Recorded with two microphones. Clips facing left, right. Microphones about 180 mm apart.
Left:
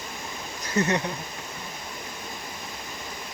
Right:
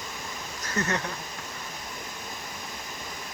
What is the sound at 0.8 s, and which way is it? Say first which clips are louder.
Speech: left 5 dB; 15° left (ahead or behind).